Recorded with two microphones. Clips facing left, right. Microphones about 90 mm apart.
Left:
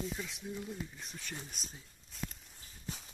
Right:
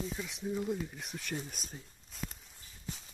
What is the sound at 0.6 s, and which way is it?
Speech, 60° right (ahead or behind).